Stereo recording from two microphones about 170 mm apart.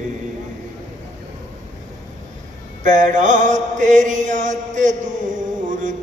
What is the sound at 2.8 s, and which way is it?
Mantra, 45° right (ahead or behind).